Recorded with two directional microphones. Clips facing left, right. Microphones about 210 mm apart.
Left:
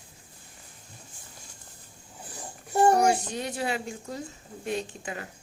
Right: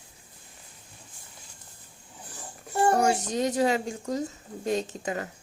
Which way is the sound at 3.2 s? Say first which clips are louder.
Right 7 dB; 40° right (ahead or behind).